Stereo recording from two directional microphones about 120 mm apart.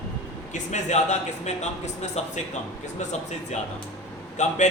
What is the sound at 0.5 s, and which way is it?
Speech, 75° left (ahead or behind).